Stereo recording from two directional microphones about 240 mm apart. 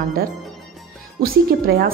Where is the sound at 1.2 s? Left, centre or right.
Right.